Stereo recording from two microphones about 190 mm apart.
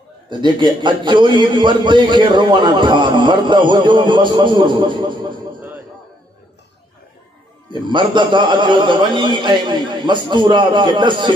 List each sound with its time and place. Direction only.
0.3 s a man's voice: 25° right (ahead or behind)
7.9 s a man's voice: 25° right (ahead or behind)